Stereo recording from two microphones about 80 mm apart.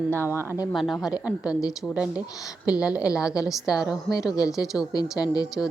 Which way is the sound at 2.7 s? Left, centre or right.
Centre.